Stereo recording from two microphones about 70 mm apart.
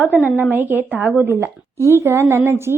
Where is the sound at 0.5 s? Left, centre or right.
Right.